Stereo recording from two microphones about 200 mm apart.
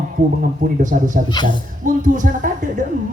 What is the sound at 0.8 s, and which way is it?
Speech, 40° right (ahead or behind).